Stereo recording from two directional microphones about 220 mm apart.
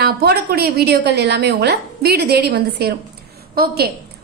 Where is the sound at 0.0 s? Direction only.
45° right (ahead or behind).